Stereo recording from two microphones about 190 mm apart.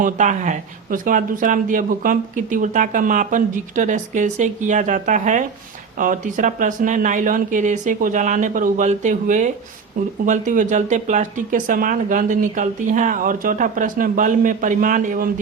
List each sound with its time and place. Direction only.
0.0 s speech: 40° right (ahead or behind)